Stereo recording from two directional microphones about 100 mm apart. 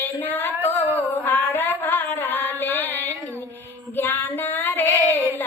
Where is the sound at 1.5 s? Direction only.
20° left (ahead or behind).